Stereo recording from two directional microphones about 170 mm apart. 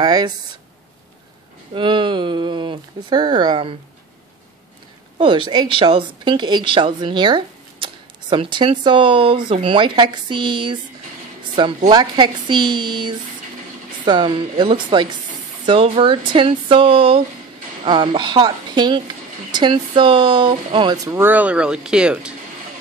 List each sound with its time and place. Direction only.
0.0 s speech: 25° right (ahead or behind)
1.7 s speech: 30° right (ahead or behind)
5.2 s speech: 30° right (ahead or behind); by 22.3 s 5° right (ahead or behind)